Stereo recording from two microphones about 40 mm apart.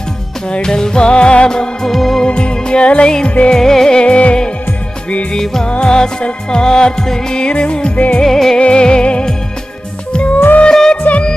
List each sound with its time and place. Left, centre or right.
0.5 s music: centre
2.2 s music: left
4.0 s music: left
5.3 s music: centre
5.7 s music: left
8.2 s music: centre
8.5 s music: left
10.7 s music: centre
11.0 s music: left